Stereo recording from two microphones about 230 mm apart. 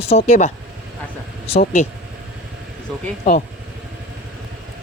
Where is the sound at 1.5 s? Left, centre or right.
Left.